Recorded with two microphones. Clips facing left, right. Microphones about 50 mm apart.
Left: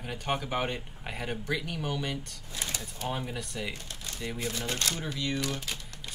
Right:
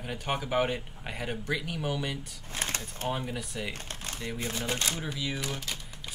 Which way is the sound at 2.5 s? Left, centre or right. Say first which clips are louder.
Right 3 dB; right.